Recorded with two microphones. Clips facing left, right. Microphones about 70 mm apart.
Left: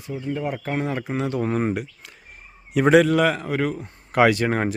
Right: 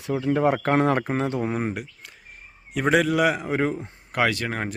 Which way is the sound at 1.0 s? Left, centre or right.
Right.